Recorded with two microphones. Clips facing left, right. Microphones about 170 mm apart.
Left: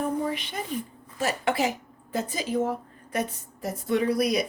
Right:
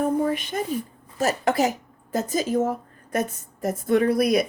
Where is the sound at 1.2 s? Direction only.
40° right (ahead or behind).